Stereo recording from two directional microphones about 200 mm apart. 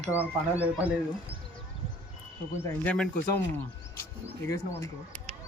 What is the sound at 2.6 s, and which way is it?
Speech, 5° left (ahead or behind).